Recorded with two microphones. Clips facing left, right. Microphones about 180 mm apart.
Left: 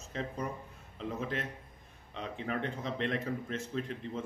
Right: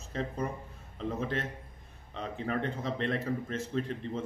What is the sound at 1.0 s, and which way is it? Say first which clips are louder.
Speech: right 3 dB; 35° right (ahead or behind).